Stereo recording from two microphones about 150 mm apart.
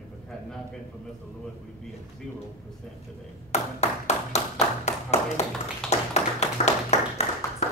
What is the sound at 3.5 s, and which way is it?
Clapping, 45° left (ahead or behind).